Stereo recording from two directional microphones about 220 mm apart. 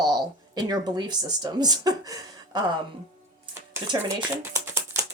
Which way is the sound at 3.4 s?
20° right (ahead or behind).